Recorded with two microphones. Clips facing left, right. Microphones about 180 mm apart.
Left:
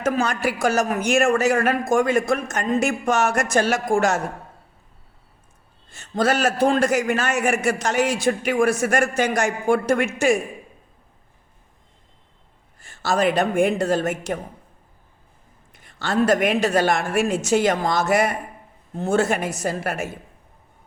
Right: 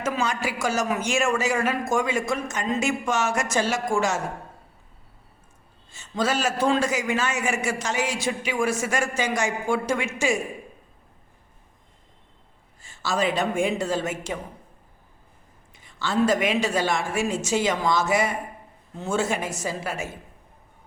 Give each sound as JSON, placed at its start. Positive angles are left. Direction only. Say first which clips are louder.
{"t": 0.0, "sound": "a man's voice", "louder": "left 4 dB", "side_deg": 60}
{"t": 5.9, "sound": "a man's voice", "louder": "left 4 dB", "side_deg": 60}
{"t": 12.8, "sound": "a man's voice", "louder": "left 4 dB", "side_deg": 65}
{"t": 15.7, "sound": "a man's voice", "louder": "left 2 dB", "side_deg": 60}